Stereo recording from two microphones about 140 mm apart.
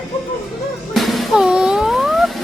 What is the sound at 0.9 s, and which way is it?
Music, centre (ahead or behind).